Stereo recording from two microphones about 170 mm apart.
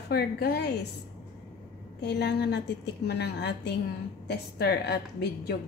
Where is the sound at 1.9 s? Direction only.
80° left.